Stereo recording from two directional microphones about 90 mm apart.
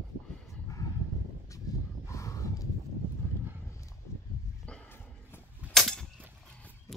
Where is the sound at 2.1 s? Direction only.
35° left (ahead or behind).